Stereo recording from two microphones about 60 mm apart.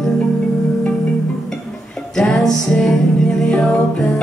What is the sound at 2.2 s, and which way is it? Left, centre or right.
Music, centre.